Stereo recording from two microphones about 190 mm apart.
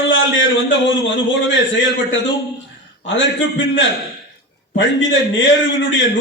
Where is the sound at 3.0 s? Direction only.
75° left (ahead or behind).